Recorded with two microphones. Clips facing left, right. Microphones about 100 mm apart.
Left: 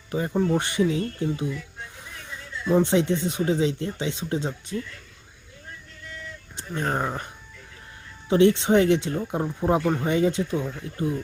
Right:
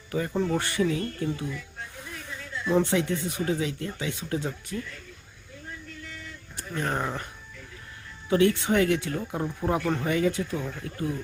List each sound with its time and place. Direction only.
0.1 s speech: 25° left (ahead or behind)
2.6 s speech: 20° left (ahead or behind)
6.6 s speech: 20° left (ahead or behind)
8.3 s speech: 25° left (ahead or behind)